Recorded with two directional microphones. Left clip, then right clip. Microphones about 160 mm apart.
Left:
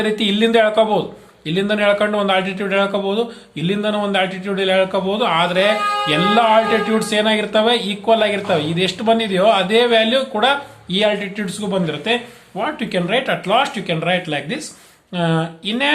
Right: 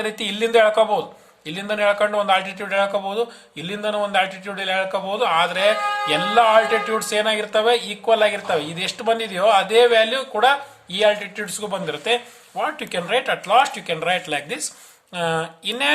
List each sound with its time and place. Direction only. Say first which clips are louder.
0.0 s a man's voice: left 6 dB; 30° right (ahead or behind)